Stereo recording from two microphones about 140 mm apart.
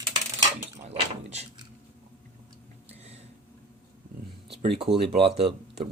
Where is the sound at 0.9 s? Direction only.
50° right (ahead or behind).